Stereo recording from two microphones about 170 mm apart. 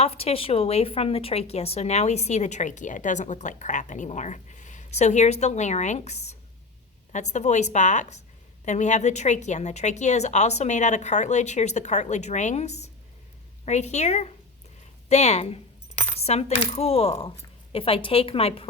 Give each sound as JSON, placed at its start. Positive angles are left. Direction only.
{"t": 0.0, "sound": "a woman's voice", "side_deg": 35}